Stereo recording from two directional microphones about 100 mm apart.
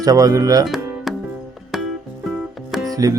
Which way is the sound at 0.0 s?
35° right (ahead or behind).